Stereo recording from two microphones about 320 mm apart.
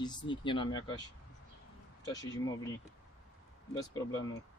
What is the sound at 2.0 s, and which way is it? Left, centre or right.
Speech, centre.